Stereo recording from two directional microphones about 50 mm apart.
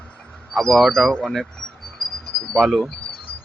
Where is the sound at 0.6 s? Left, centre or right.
Centre.